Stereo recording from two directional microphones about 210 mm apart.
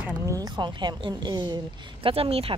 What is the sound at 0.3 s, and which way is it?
A woman's voice, 20° right (ahead or behind).